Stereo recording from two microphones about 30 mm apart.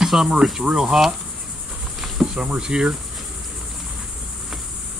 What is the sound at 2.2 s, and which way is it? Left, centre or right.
Cricket, right.